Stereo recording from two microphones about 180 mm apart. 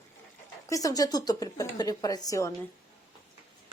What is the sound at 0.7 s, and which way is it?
Speech, 20° left (ahead or behind).